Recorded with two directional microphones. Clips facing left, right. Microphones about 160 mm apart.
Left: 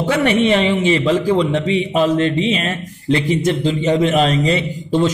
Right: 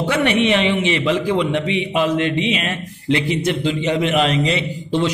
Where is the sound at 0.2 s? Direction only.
40° left (ahead or behind).